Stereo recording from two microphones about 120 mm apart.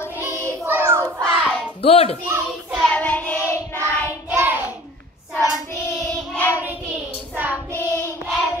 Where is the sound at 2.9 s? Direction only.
10° left (ahead or behind).